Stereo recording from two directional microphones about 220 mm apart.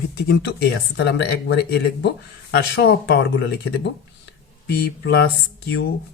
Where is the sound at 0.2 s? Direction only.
50° left (ahead or behind).